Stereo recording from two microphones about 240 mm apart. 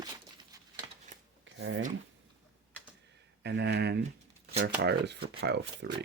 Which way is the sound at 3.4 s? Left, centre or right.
Right.